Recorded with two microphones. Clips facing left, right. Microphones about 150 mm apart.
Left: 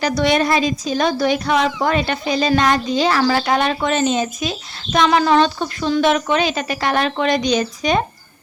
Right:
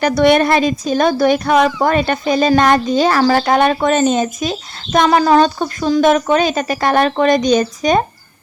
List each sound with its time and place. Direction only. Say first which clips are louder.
0.0 s a woman's voice: right 5 dB; 55° right (ahead or behind)